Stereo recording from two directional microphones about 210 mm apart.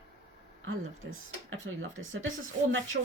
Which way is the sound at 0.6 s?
75° right (ahead or behind).